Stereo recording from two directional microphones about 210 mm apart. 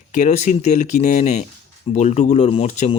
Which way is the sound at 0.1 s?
35° left (ahead or behind).